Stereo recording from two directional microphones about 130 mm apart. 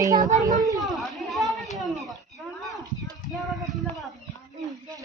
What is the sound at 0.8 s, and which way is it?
Children playing, centre (ahead or behind).